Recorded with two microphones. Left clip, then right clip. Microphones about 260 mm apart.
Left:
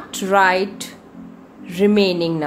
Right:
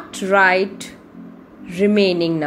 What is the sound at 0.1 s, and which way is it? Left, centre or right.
A woman's voice, centre.